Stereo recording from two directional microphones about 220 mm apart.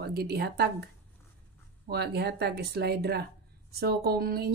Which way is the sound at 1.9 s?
50° right (ahead or behind).